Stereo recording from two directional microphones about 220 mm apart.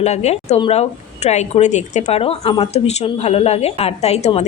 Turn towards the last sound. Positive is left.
turn(degrees=30)  # may be behind; listen again after turning